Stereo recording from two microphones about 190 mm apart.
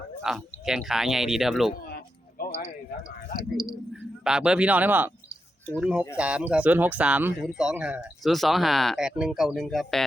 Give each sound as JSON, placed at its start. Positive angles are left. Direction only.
{"t": 0.2, "sound": "speech", "side_deg": -5}
{"t": 2.4, "sound": "a sound", "side_deg": 50}
{"t": 4.2, "sound": "speech", "side_deg": -5}